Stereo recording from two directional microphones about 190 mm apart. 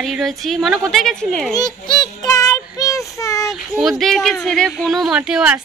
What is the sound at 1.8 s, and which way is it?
Child singing, 20° left (ahead or behind).